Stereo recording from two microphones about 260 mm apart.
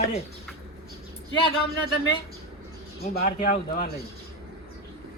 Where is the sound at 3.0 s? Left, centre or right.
Left.